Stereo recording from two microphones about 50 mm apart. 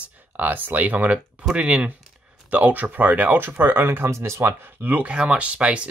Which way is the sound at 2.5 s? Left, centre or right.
Right.